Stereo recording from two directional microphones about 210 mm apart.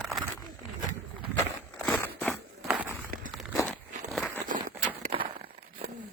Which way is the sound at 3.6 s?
5° left (ahead or behind).